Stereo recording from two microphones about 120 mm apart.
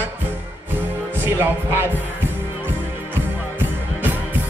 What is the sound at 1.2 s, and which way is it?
Music, 20° right (ahead or behind).